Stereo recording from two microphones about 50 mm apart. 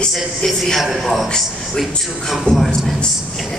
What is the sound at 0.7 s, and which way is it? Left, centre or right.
Speech, centre.